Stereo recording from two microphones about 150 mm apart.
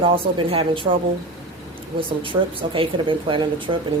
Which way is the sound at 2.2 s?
35° right (ahead or behind).